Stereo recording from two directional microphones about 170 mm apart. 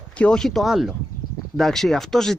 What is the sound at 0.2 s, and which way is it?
Speech, 5° left (ahead or behind).